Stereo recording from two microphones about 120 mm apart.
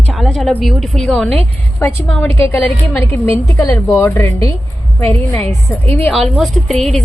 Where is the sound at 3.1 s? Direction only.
25° left (ahead or behind).